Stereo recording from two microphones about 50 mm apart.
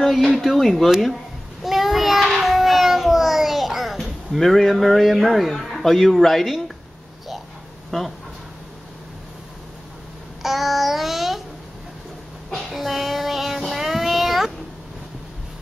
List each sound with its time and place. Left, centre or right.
0.0 s speech: centre
1.6 s child singing: centre
10.4 s child singing: centre
12.6 s child singing: centre